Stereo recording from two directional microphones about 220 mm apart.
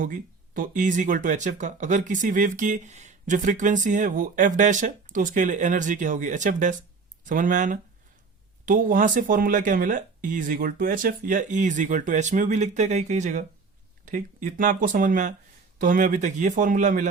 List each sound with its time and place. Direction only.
0.0 s speech: 35° right (ahead or behind)